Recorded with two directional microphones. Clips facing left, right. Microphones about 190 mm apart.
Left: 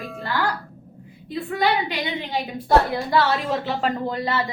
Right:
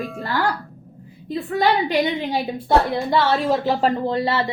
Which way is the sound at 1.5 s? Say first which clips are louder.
Right 4 dB; 45° right (ahead or behind).